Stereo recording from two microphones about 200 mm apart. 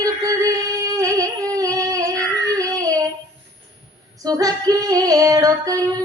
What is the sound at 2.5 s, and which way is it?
Child singing, 15° right (ahead or behind).